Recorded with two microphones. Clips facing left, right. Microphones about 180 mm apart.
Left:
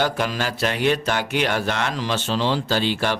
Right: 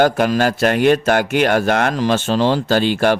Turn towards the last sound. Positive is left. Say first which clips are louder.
# right 7 dB
turn(degrees=-50)  # may be behind; listen again after turning